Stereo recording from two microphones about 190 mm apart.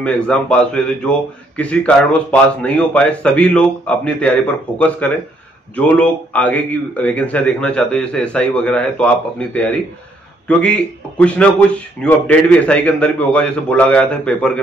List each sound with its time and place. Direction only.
0.0 s a man's voice: 5° left (ahead or behind)